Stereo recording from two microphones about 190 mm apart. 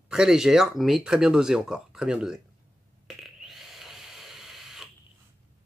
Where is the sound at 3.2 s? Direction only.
Centre (ahead or behind).